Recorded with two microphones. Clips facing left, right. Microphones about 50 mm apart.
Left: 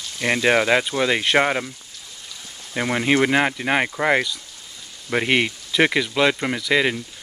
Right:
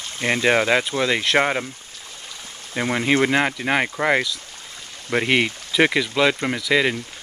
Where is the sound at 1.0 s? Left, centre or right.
Centre.